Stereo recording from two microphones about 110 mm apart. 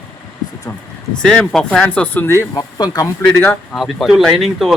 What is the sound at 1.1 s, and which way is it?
Speech, 5° left (ahead or behind).